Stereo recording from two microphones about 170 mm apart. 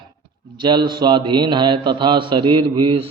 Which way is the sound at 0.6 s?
25° right (ahead or behind).